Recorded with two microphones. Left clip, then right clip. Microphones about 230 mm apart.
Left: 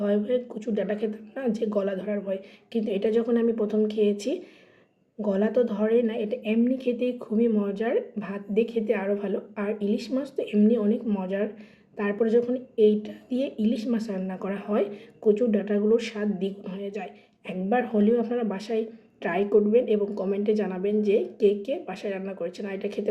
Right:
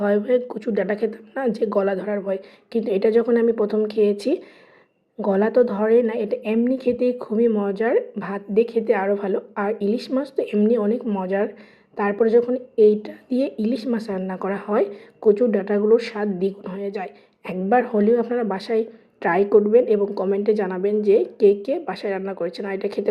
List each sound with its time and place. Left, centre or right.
0.0 s a woman's voice: centre
12.7 s speech: right
13.0 s a woman's voice: centre